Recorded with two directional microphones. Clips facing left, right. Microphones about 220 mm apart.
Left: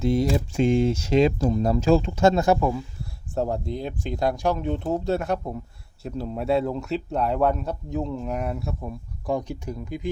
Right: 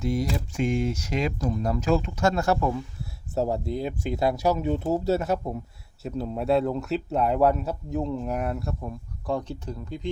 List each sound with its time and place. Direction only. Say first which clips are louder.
0.0 s speech: left 5 dB; 25° left (ahead or behind); by 2.8 s 10° left (ahead or behind)
3.0 s speech: right 1 dB; 5° right (ahead or behind)